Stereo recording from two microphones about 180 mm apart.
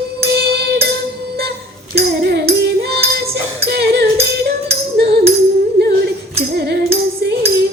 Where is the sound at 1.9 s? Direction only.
65° right (ahead or behind).